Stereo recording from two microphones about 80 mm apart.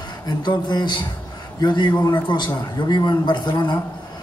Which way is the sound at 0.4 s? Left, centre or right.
Left.